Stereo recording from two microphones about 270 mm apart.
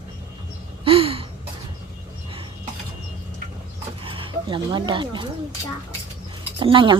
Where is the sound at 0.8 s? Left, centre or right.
Right.